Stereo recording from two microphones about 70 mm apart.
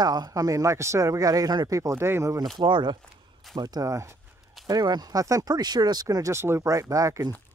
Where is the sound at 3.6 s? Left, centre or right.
Right.